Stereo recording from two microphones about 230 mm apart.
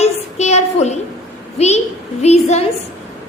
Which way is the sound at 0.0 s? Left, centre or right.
Left.